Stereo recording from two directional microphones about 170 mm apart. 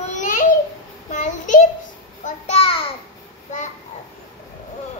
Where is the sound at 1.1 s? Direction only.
45° left (ahead or behind).